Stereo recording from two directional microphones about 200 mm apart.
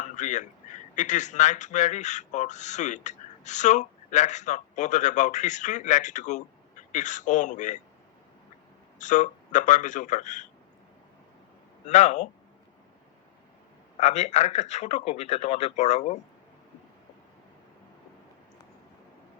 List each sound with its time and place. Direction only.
0.0 s speech: 40° left (ahead or behind)
9.0 s speech: 40° left (ahead or behind)
11.9 s speech: 35° left (ahead or behind)
14.0 s speech: 35° left (ahead or behind)